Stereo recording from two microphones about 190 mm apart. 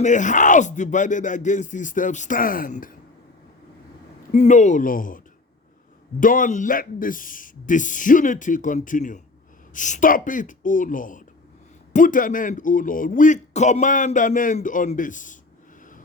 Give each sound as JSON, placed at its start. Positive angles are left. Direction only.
{"t": 0.0, "sound": "speech", "side_deg": 40}
{"t": 4.3, "sound": "a man's voice", "side_deg": 40}